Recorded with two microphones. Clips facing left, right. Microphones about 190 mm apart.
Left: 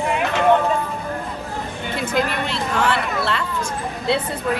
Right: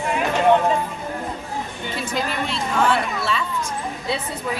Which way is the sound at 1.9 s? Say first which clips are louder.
Left 4 dB; 60° left (ahead or behind).